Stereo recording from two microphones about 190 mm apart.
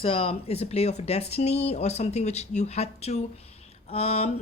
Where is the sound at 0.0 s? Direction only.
30° left (ahead or behind).